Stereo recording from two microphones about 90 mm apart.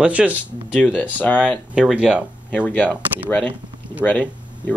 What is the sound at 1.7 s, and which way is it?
Speech, 10° right (ahead or behind).